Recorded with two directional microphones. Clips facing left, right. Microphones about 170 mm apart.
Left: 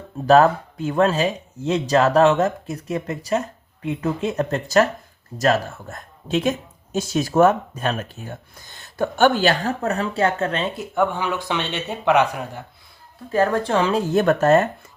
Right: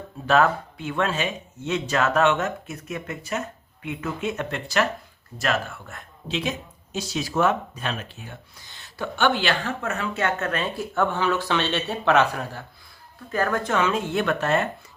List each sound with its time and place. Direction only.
0.3 s speech: 35° left (ahead or behind)
10.9 s a man's voice: 15° left (ahead or behind)
13.3 s speech: 30° left (ahead or behind)